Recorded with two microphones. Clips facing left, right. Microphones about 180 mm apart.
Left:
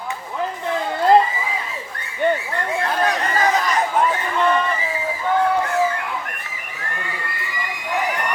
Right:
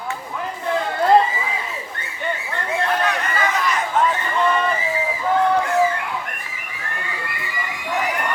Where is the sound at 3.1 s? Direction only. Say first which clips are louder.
Left 3 dB; 40° left (ahead or behind).